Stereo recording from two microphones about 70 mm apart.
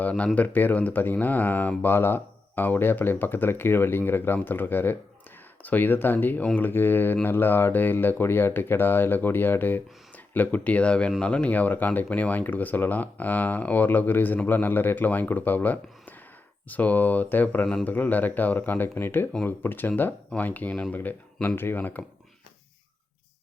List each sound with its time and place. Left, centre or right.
0.0 s speech: centre